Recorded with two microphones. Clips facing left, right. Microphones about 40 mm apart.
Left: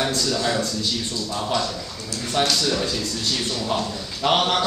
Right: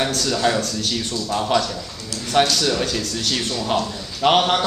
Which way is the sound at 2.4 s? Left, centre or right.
Right.